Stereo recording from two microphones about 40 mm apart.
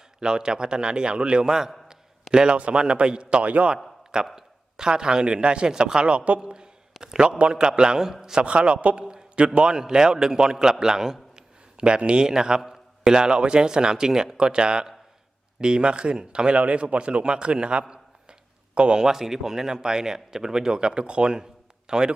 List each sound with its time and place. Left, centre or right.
0.2 s a man's voice: centre
3.4 s a man's voice: right
4.4 s speech: centre
6.4 s a sound: right
7.3 s a man's voice: right
8.4 s a man's voice: right
9.0 s a sound: right
9.6 s speech: centre
11.8 s a man's voice: right
16.6 s a man's voice: right
17.8 s a sound: right
19.0 s speech: centre